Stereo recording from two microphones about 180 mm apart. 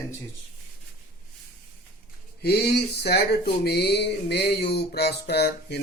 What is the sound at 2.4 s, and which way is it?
Speech, 65° left (ahead or behind).